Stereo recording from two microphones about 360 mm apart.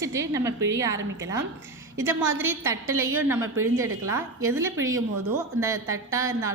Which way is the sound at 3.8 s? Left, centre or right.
Right.